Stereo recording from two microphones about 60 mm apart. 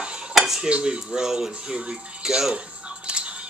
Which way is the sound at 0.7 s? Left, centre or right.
Centre.